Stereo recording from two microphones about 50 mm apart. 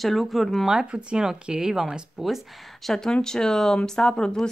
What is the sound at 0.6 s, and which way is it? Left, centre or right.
Speech, centre.